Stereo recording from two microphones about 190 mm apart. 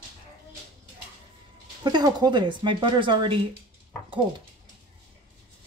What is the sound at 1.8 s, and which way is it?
Speech, 20° right (ahead or behind).